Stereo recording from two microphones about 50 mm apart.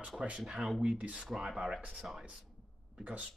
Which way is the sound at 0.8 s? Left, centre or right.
Right.